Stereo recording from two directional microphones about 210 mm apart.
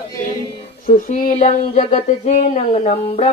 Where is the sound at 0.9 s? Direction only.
40° left (ahead or behind).